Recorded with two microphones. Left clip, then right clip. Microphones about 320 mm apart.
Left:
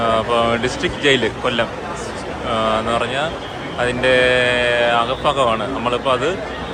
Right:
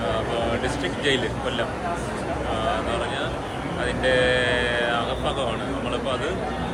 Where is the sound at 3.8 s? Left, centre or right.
Centre.